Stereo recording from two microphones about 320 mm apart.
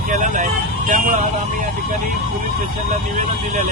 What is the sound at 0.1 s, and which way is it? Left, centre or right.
Vehicle, right.